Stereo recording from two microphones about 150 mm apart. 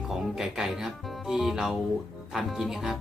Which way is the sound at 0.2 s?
Centre (ahead or behind).